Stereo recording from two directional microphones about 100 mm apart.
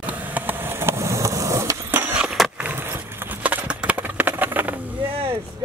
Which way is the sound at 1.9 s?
15° right (ahead or behind).